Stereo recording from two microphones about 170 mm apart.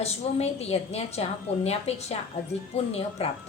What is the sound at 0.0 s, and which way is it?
A woman's voice, 40° left (ahead or behind).